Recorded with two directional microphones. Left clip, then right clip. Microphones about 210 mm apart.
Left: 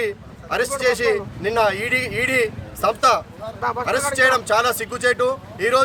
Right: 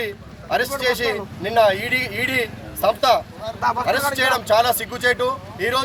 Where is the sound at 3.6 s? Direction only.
50° right (ahead or behind).